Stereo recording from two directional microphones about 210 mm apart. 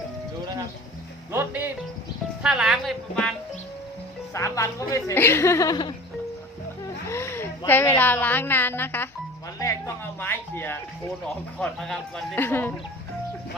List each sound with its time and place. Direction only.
1.3 s music: 10° right (ahead or behind)
4.4 s speech: 15° left (ahead or behind)
7.1 s a woman's voice: 10° left (ahead or behind)
9.6 s music: 15° left (ahead or behind)
11.6 s speech: centre (ahead or behind)